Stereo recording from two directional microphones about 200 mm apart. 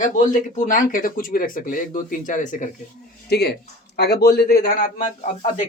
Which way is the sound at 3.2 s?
55° left (ahead or behind).